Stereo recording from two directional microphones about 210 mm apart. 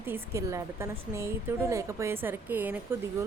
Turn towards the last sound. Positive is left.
turn(degrees=-10)  # may be behind; listen again after turning